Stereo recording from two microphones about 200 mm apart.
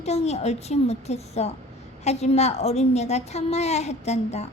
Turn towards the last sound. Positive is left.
turn(degrees=35)  # may be behind; listen again after turning